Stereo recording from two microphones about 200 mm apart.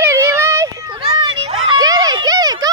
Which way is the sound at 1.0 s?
25° right (ahead or behind).